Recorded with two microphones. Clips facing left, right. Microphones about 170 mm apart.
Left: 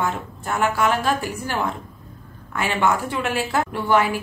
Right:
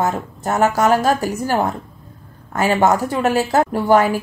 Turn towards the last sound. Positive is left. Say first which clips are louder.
# right 5 dB
turn(degrees=-40)  # may be behind; listen again after turning